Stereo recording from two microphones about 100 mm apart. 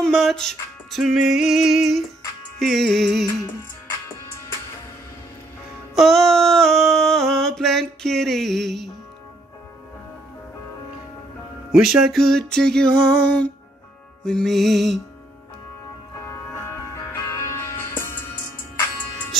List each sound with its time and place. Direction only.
0.0 s music: centre (ahead or behind)
5.9 s a sound: centre (ahead or behind)
11.7 s music: 5° right (ahead or behind)
16.2 s music: 30° left (ahead or behind)